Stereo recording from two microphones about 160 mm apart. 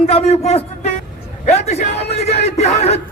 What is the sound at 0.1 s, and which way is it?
A man's voice, 40° left (ahead or behind).